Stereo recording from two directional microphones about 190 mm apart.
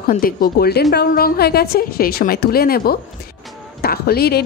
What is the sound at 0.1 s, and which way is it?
A woman's voice, 50° left (ahead or behind).